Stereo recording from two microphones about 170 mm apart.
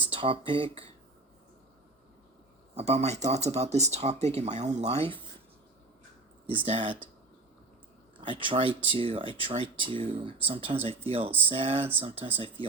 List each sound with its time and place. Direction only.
0.1 s speech: 30° right (ahead or behind)
2.7 s speech: 40° right (ahead or behind)
6.7 s speech: 30° right (ahead or behind)
8.2 s speech: 30° right (ahead or behind)